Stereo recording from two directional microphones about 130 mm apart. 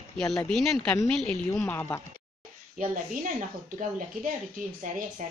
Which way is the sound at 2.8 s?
90° right.